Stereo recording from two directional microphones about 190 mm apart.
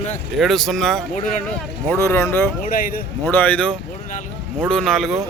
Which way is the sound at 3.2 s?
10° left (ahead or behind).